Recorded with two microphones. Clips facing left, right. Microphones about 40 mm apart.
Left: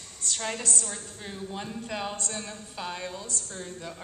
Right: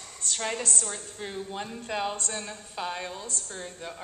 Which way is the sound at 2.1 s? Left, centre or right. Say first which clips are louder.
Right 1 dB; right.